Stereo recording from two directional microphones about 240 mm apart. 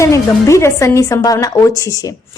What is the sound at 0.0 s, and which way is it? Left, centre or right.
A woman's voice, centre.